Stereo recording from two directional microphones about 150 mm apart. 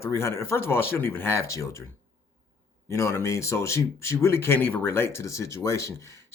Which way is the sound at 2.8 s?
20° left (ahead or behind).